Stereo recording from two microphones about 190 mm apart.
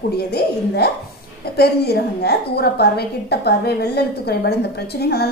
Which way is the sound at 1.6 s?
60° left (ahead or behind).